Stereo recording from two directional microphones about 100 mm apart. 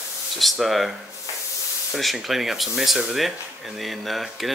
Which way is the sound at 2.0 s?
Centre (ahead or behind).